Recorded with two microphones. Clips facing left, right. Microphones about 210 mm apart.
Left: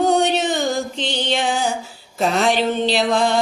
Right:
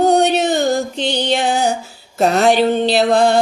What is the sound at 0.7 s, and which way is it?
Music, 40° right (ahead or behind).